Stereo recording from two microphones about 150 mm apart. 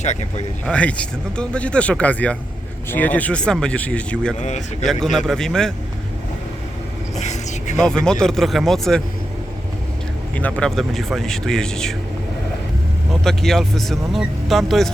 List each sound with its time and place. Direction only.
0.0 s speech: 50° left (ahead or behind)
0.6 s speech: 10° left (ahead or behind)
4.4 s speech: 50° left (ahead or behind)
5.1 s speech: 5° left (ahead or behind)
7.2 s vehicle: 50° left (ahead or behind)
7.8 s speech: 5° left (ahead or behind)
10.3 s speech: 10° left (ahead or behind)
13.2 s speech: centre (ahead or behind)